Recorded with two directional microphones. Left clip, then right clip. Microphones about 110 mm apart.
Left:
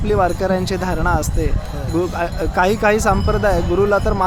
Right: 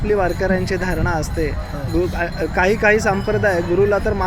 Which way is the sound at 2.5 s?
20° left (ahead or behind).